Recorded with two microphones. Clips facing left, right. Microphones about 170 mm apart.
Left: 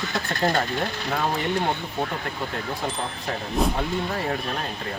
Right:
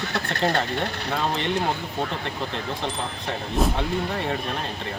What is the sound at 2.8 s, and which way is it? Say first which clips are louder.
Speech: even; 5° left (ahead or behind).